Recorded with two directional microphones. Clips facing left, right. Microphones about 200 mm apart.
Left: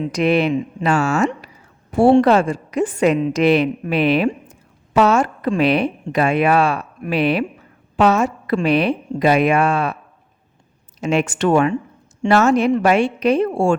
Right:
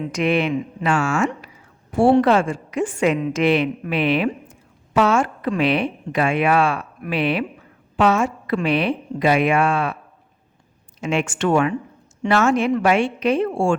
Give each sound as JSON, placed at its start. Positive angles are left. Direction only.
{"t": 0.1, "sound": "a woman's voice", "side_deg": 35}
{"t": 11.0, "sound": "a woman's voice", "side_deg": 40}